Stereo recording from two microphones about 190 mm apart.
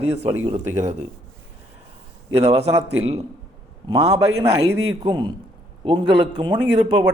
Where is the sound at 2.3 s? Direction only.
35° right (ahead or behind).